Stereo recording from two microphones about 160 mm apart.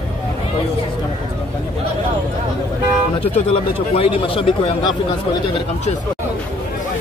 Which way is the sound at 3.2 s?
35° left (ahead or behind).